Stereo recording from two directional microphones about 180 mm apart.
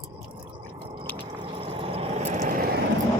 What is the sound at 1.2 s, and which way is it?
Squish, 25° right (ahead or behind).